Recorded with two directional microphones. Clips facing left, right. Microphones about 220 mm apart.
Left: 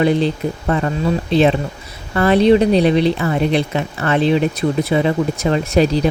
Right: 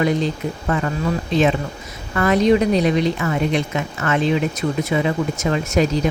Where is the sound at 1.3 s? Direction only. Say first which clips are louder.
Left 3 dB; 35° left (ahead or behind).